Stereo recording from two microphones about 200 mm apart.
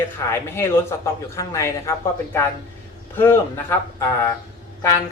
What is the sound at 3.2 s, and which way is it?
Speech, 10° left (ahead or behind).